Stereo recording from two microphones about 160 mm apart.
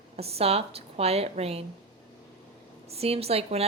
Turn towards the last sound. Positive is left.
turn(degrees=-40)  # may be behind; listen again after turning